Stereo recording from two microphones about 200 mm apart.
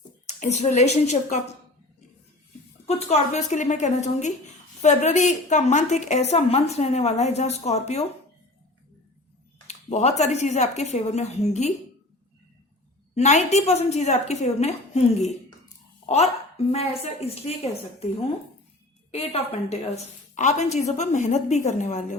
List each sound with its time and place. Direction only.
0.3 s a woman's voice: 35° left (ahead or behind)
2.8 s a woman's voice: 30° left (ahead or behind)
9.6 s a woman's voice: 35° left (ahead or behind)
13.1 s a woman's voice: 35° left (ahead or behind)
16.0 s a woman's voice: 30° left (ahead or behind)